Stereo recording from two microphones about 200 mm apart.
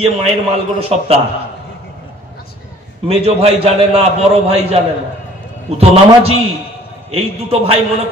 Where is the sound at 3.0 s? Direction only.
30° right (ahead or behind).